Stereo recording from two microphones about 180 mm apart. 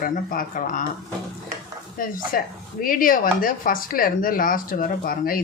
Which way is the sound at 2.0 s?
50° left (ahead or behind).